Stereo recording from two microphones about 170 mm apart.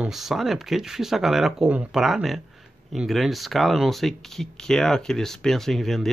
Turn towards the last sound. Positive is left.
turn(degrees=0)  # may be behind; listen again after turning